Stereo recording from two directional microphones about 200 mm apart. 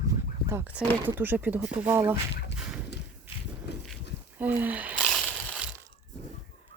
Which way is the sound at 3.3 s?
10° right (ahead or behind).